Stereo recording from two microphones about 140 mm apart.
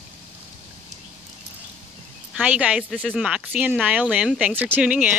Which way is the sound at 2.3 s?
10° right (ahead or behind).